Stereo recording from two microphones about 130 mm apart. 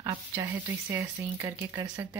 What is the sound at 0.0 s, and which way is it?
Speech, 25° right (ahead or behind).